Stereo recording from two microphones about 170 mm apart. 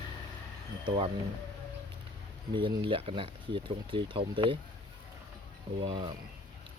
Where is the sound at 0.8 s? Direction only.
30° right (ahead or behind).